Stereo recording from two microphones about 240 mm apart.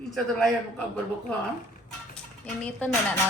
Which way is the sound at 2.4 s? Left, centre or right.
Centre.